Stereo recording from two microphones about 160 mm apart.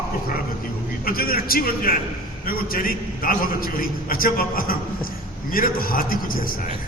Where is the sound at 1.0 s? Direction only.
65° left (ahead or behind).